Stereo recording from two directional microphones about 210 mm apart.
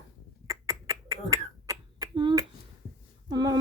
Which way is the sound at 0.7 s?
15° right (ahead or behind).